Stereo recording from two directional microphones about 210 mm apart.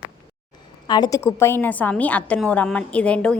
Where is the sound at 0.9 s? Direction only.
15° left (ahead or behind).